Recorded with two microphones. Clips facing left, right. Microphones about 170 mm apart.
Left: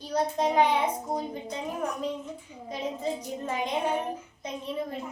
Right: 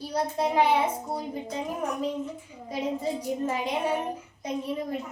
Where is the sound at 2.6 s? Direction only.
10° right (ahead or behind).